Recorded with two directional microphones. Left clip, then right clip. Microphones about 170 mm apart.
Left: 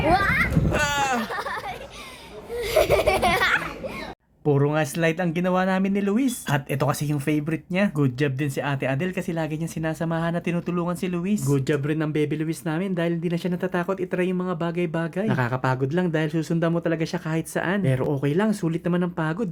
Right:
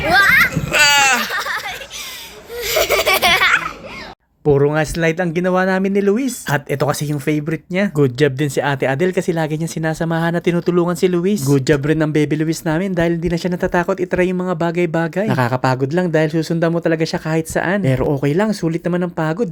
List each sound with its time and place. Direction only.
0.1 s children playing: 10° left (ahead or behind)
2.6 s laughter: centre (ahead or behind)
4.4 s speech: 25° right (ahead or behind)
7.9 s speech: 35° right (ahead or behind)